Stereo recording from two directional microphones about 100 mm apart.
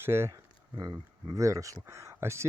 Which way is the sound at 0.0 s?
25° right (ahead or behind).